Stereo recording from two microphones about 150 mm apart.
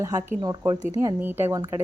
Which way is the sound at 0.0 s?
20° right (ahead or behind).